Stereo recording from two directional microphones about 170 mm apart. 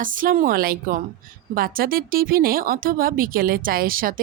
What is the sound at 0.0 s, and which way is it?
A woman's voice, 55° right (ahead or behind).